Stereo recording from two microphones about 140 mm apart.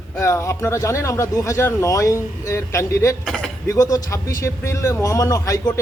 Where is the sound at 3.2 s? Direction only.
5° left (ahead or behind).